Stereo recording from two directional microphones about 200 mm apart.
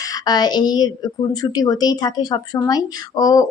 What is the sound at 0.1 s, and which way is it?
A woman's voice, 20° left (ahead or behind).